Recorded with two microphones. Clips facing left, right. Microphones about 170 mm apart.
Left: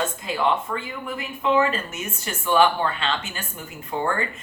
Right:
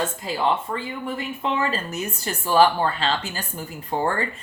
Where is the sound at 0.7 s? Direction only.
30° right (ahead or behind).